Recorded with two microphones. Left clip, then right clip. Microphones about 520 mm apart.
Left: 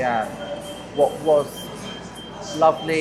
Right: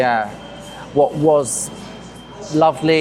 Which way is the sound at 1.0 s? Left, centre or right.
Right.